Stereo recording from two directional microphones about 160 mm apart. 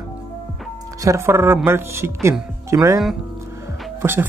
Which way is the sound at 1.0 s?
15° right (ahead or behind).